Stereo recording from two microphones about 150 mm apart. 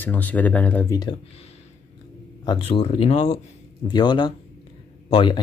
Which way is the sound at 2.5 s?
35° left (ahead or behind).